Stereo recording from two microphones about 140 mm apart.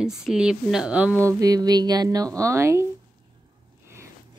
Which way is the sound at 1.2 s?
25° right (ahead or behind).